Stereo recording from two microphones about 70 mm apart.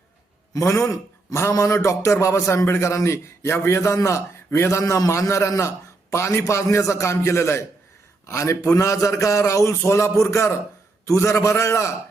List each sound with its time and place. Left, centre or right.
0.5 s a man's voice: left